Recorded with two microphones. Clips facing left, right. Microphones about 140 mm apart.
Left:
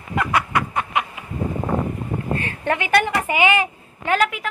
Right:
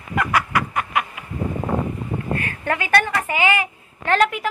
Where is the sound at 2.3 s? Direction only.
25° left (ahead or behind).